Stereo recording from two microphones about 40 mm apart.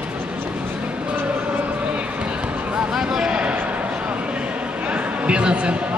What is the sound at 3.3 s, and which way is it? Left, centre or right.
Basketball bounce, right.